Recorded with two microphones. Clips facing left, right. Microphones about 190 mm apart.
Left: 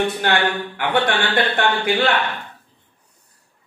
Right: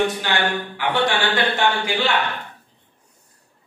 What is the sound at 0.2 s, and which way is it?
Speech, 55° left (ahead or behind).